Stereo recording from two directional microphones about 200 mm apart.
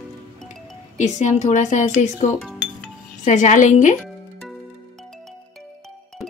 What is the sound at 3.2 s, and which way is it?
Speech, 35° left (ahead or behind).